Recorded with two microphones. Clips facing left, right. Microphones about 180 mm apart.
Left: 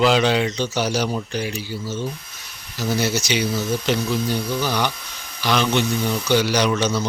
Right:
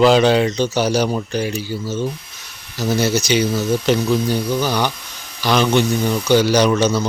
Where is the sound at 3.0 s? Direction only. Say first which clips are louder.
Right 7 dB; 40° right (ahead or behind).